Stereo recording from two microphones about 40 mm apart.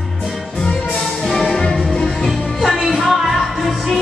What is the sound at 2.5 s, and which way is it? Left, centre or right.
Music, centre.